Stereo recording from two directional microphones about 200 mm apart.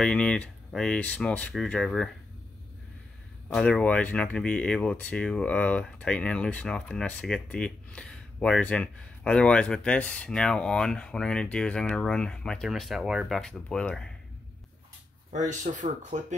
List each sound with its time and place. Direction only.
0.0 s speech: 5° left (ahead or behind)
3.4 s speech: 5° left (ahead or behind)
15.3 s speech: 40° right (ahead or behind)